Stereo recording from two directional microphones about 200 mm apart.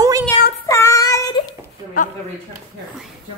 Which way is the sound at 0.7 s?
15° left (ahead or behind).